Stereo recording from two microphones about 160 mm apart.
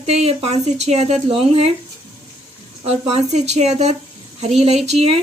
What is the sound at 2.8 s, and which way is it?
Speech, 40° right (ahead or behind).